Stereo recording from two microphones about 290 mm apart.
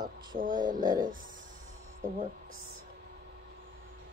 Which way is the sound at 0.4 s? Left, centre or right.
Right.